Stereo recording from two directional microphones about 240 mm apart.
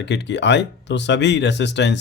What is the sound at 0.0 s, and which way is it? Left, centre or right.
Speech, left.